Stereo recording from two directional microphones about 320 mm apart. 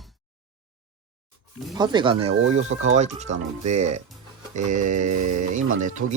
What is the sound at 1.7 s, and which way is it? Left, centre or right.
Speech, centre.